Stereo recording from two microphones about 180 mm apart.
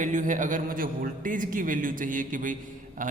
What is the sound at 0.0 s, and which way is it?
A man's voice, 45° right (ahead or behind).